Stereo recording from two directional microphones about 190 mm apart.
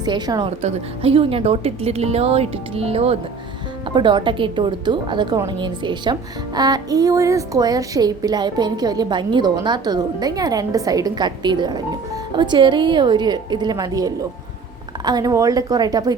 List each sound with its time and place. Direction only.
0.0 s a woman's voice: 20° right (ahead or behind)